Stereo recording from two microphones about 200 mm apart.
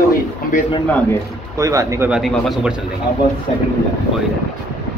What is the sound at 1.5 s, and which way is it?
Speech, 15° right (ahead or behind).